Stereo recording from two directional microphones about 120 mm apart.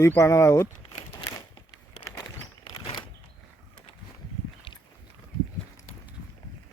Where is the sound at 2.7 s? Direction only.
45° left (ahead or behind).